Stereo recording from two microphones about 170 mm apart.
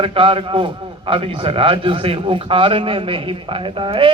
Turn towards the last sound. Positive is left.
turn(degrees=-30)  # may be behind; listen again after turning